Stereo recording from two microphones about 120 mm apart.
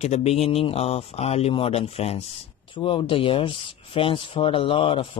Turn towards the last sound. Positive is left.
turn(degrees=45)  # may be behind; listen again after turning